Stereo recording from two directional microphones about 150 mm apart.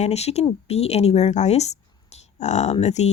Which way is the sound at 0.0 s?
45° left (ahead or behind).